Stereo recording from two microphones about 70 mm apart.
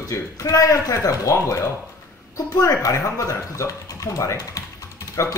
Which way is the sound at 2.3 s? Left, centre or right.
Left.